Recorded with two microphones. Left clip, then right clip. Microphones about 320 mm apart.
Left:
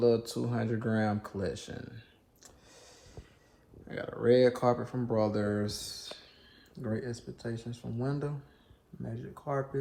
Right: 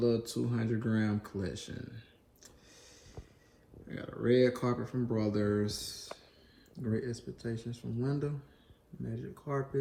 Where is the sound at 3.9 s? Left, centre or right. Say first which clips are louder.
Left 4 dB; centre.